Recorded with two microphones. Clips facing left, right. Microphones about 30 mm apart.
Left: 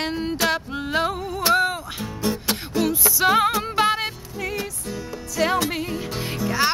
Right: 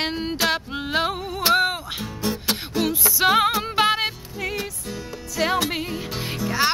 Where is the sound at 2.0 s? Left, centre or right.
Centre.